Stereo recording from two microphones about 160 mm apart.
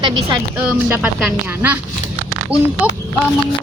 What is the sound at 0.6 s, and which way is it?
Speech, 10° right (ahead or behind).